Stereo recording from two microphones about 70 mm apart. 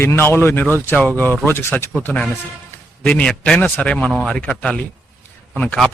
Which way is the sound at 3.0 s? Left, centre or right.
Centre.